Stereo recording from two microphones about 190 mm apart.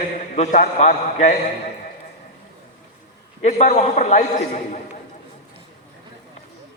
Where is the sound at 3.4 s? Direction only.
40° left (ahead or behind).